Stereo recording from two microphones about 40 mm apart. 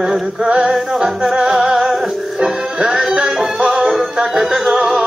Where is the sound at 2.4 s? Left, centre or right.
Right.